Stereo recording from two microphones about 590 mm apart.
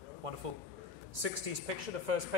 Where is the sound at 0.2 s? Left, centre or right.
Right.